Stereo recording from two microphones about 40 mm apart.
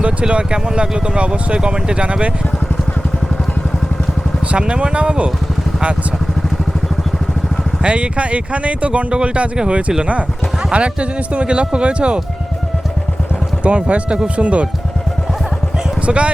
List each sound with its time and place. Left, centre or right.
0.0 s speech: right
4.5 s speech: right
7.8 s speech: right
13.7 s speech: right
16.0 s speech: right